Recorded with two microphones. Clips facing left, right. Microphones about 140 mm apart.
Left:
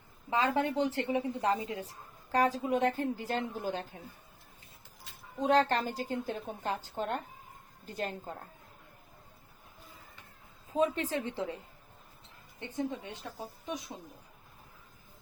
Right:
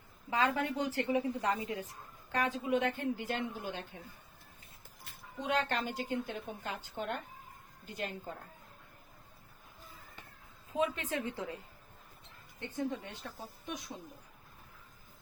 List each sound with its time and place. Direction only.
0.3 s a woman's voice: 25° left (ahead or behind)
5.4 s a woman's voice: 35° left (ahead or behind)
10.8 s a woman's voice: 35° left (ahead or behind)
12.5 s speech: 20° left (ahead or behind)